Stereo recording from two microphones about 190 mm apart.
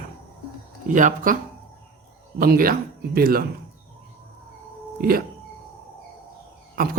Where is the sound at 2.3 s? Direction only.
50° right (ahead or behind).